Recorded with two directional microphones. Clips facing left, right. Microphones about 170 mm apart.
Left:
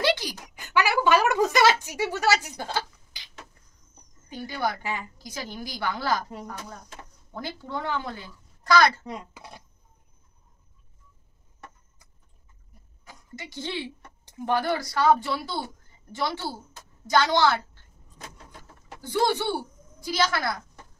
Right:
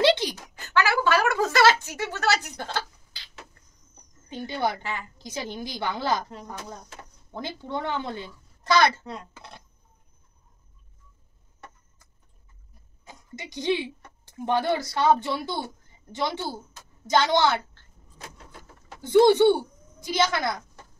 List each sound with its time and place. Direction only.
0.0 s a sound: 25° right (ahead or behind)
0.6 s speech: 15° left (ahead or behind)
4.3 s a woman's voice: 25° right (ahead or behind)
7.3 s a woman's voice: 20° right (ahead or behind)
9.0 s speech: 15° left (ahead or behind)
13.0 s a woman's voice: 20° right (ahead or behind)
18.9 s speech: 20° right (ahead or behind)